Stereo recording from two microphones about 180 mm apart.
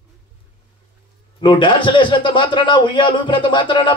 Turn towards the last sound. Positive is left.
turn(degrees=25)  # may be behind; listen again after turning